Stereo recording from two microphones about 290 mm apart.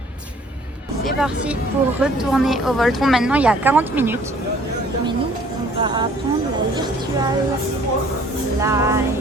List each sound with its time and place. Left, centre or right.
1.0 s speech: centre
5.8 s music: centre
8.6 s music: centre